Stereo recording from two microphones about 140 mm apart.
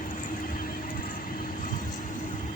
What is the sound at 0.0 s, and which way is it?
Vehicle, 70° left (ahead or behind).